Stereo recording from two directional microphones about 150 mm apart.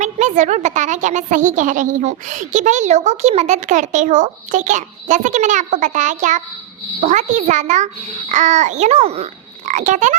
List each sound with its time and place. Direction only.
0.0 s a child's voice: 50° right (ahead or behind)